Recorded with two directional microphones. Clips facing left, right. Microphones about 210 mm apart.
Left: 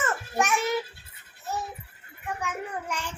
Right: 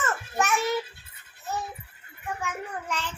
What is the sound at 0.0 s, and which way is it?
Child singing, 15° left (ahead or behind).